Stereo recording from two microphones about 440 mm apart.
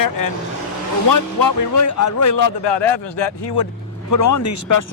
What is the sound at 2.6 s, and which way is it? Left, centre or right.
Speech, left.